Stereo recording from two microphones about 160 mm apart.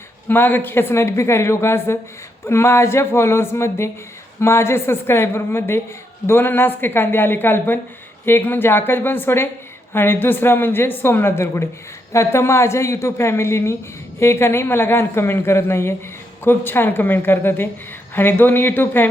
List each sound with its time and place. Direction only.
0.3 s a woman's voice: 10° left (ahead or behind)